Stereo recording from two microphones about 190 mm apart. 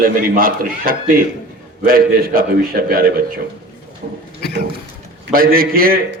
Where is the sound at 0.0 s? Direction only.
50° right (ahead or behind).